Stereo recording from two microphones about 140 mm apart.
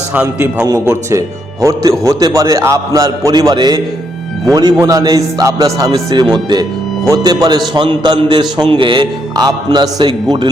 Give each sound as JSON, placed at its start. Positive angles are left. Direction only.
{"t": 0.1, "sound": "a man's voice", "side_deg": -15}